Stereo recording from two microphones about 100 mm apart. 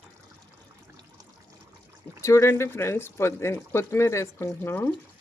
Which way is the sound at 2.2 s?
30° left (ahead or behind).